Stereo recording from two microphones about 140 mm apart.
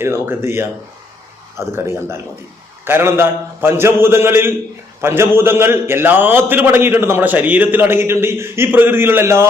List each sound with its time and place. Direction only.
0.0 s a man's voice: 15° right (ahead or behind)